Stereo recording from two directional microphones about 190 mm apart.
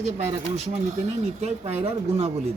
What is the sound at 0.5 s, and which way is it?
Speech, 35° right (ahead or behind).